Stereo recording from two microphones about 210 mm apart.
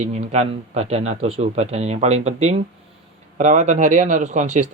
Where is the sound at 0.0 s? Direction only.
35° right (ahead or behind).